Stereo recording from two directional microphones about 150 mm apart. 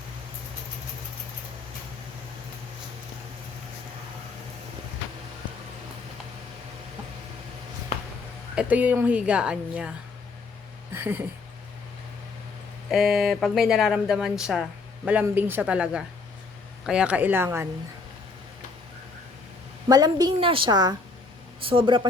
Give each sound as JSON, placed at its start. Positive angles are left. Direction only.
{"t": 8.5, "sound": "a woman's voice", "side_deg": -10}
{"t": 10.9, "sound": "a woman's voice", "side_deg": -15}
{"t": 12.9, "sound": "a woman's voice", "side_deg": 0}
{"t": 19.9, "sound": "a woman's voice", "side_deg": -25}